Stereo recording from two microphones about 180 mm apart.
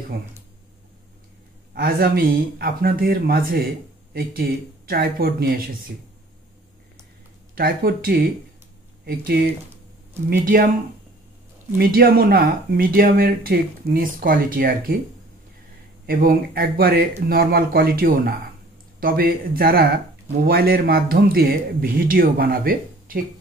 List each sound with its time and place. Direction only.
1.7 s speech: 55° right (ahead or behind)
7.5 s speech: 55° right (ahead or behind)
11.8 s speech: 55° right (ahead or behind)
16.1 s speech: 55° right (ahead or behind)